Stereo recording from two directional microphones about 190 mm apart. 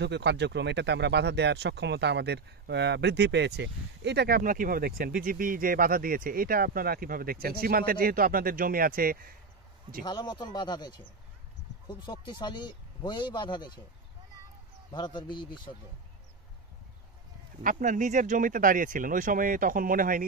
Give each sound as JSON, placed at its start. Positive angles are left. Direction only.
{"t": 0.0, "sound": "speech", "side_deg": -65}
{"t": 10.0, "sound": "a man's voice", "side_deg": 20}
{"t": 14.9, "sound": "a man's voice", "side_deg": 25}
{"t": 17.6, "sound": "speech", "side_deg": -45}